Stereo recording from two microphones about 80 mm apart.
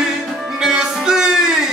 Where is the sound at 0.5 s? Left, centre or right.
Centre.